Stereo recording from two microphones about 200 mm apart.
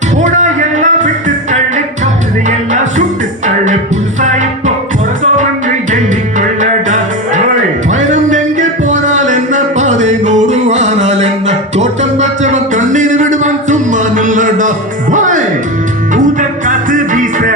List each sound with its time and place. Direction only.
0.2 s music: 35° right (ahead or behind)
4.2 s music: 40° right (ahead or behind)